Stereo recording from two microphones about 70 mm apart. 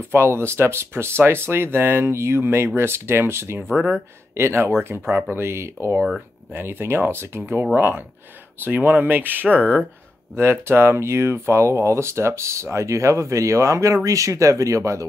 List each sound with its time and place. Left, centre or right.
0.0 s speech: right
9.5 s speech: centre
10.3 s speech: right